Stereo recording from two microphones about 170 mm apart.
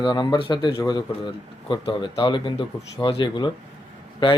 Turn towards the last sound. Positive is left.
turn(degrees=25)  # may be behind; listen again after turning